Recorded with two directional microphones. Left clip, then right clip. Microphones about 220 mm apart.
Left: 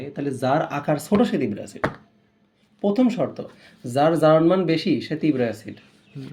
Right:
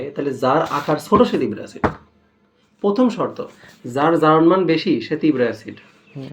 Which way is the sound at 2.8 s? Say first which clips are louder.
Right 3 dB; 55° left (ahead or behind).